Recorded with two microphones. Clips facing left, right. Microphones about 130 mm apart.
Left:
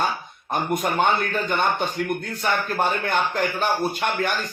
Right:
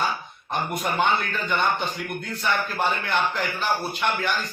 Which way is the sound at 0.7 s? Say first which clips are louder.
Left 2 dB; 45° left (ahead or behind).